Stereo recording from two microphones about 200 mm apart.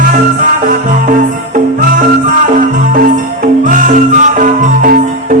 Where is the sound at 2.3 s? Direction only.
40° right (ahead or behind).